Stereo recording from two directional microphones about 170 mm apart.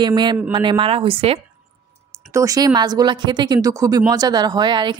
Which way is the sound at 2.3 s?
20° right (ahead or behind).